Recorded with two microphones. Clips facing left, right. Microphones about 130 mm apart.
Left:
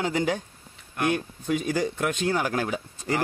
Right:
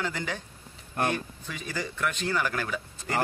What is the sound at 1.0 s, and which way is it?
Speech, 35° right (ahead or behind).